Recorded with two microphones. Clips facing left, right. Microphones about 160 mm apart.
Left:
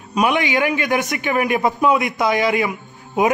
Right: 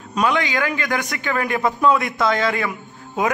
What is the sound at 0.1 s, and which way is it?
A man's voice, 20° left (ahead or behind).